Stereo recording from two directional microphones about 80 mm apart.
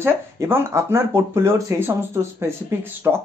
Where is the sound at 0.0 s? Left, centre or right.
Right.